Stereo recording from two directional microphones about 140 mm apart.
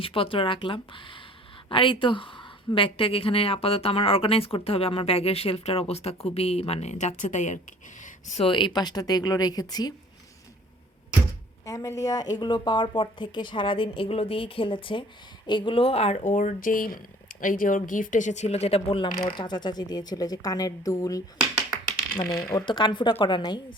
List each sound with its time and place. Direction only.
0.0 s a woman's voice: 40° left (ahead or behind); by 7.6 s 60° left (ahead or behind)
8.0 s a sound: 55° left (ahead or behind)
8.4 s speech: 35° left (ahead or behind)
11.6 s a woman's voice: 25° left (ahead or behind)
22.5 s a woman's voice: 35° left (ahead or behind)